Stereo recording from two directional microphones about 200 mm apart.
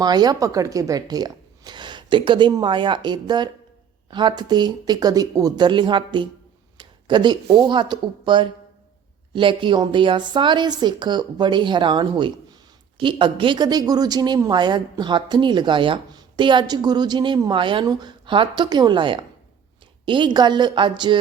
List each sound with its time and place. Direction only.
0.0 s speech: 20° right (ahead or behind)